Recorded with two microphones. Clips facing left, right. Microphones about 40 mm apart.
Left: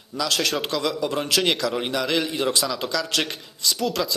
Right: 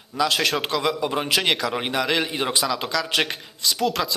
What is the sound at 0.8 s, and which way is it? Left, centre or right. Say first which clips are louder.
A man's voice: right 1 dB; right.